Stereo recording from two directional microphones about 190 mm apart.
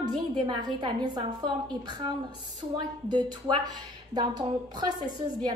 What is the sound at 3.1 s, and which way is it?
A woman's voice, 20° right (ahead or behind).